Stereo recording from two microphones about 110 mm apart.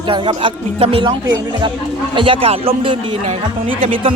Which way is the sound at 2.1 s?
55° right (ahead or behind).